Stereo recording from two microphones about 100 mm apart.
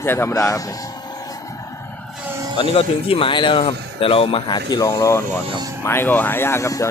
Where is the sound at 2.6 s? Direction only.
65° left (ahead or behind).